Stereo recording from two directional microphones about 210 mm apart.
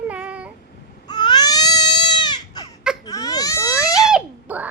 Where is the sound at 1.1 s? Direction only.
20° left (ahead or behind).